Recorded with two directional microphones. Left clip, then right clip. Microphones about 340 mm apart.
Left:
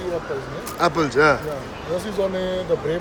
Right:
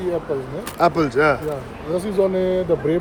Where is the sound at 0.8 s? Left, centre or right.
Centre.